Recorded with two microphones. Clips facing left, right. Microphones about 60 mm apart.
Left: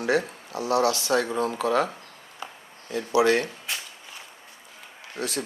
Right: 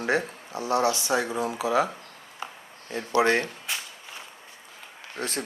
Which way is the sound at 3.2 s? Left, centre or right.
Right.